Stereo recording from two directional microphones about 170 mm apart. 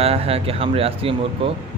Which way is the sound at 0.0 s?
35° right (ahead or behind).